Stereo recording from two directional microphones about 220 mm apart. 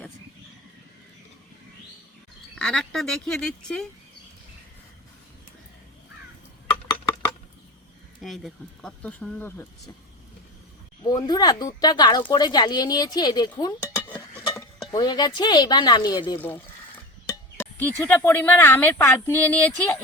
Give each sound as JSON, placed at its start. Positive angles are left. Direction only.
{"t": 2.6, "sound": "speech", "side_deg": 5}
{"t": 8.2, "sound": "speech", "side_deg": 0}
{"t": 11.0, "sound": "speech", "side_deg": 20}
{"t": 17.6, "sound": "speech", "side_deg": 10}